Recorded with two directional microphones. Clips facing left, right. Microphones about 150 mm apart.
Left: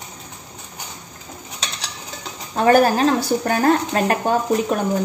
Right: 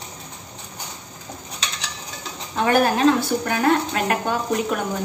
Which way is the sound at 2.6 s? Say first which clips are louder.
Left 3 dB; 35° left (ahead or behind).